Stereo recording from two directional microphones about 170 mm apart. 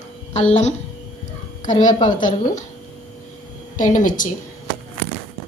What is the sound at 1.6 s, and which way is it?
A woman's voice, 45° left (ahead or behind).